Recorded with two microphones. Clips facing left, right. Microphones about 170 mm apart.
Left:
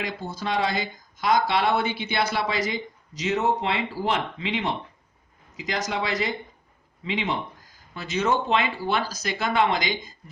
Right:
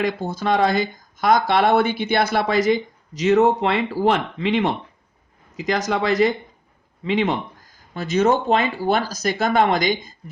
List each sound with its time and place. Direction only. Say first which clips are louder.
0.0 s speech: right 8 dB; 50° right (ahead or behind)